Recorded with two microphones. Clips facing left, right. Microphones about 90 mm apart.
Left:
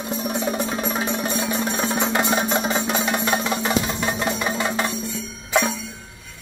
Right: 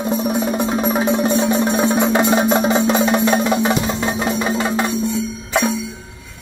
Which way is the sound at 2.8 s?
25° right (ahead or behind).